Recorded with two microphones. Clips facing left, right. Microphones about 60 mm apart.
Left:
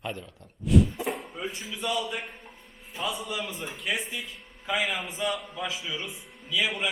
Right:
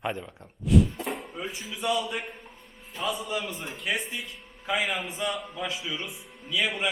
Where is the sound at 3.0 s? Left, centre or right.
Centre.